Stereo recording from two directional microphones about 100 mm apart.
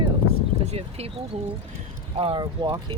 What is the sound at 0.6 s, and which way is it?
Speech, 85° right.